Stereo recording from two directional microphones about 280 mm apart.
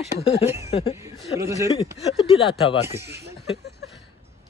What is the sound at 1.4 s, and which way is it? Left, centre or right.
Speech, centre.